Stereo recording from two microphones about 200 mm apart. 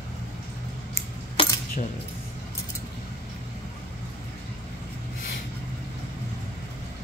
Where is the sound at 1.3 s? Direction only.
25° left (ahead or behind).